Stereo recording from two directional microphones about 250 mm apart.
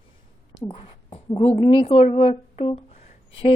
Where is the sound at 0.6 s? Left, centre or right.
Left.